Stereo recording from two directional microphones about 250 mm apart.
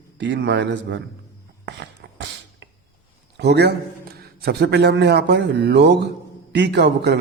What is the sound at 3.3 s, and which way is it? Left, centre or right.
A man's voice, right.